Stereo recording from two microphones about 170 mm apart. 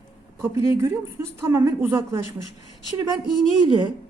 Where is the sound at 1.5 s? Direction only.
15° right (ahead or behind).